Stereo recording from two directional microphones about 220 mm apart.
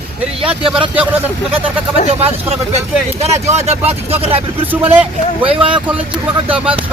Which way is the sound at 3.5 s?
30° right (ahead or behind).